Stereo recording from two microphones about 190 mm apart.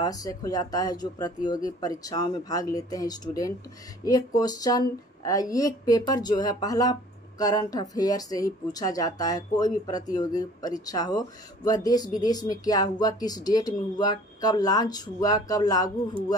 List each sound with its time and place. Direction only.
0.0 s speech: 20° left (ahead or behind)